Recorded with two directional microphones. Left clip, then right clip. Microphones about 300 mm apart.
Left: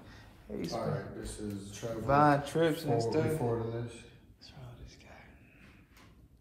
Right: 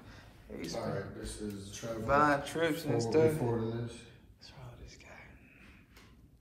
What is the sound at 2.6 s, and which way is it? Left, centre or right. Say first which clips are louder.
Speech: left 2 dB; centre.